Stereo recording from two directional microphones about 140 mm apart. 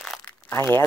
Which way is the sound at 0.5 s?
15° left (ahead or behind).